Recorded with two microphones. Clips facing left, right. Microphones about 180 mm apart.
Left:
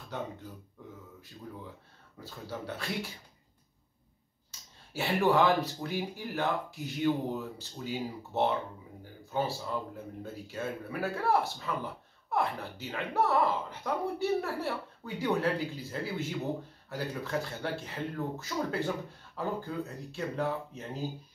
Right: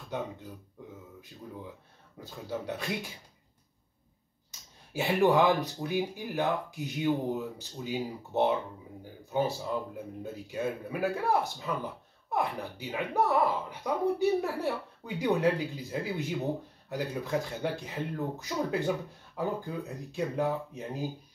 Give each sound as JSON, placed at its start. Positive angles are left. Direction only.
{"t": 2.1, "sound": "a man's voice", "side_deg": -15}
{"t": 4.5, "sound": "a man's voice", "side_deg": -15}